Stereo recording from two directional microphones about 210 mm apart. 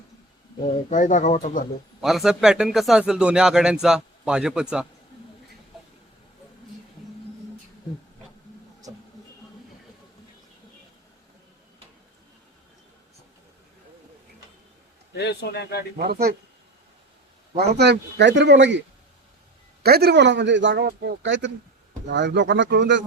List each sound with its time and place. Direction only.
0.6 s speech: 35° left (ahead or behind)
2.0 s speech: centre (ahead or behind)
15.1 s speech: 50° left (ahead or behind)
16.0 s speech: 50° right (ahead or behind)
17.6 s speech: 50° right (ahead or behind)
19.8 s speech: 50° right (ahead or behind)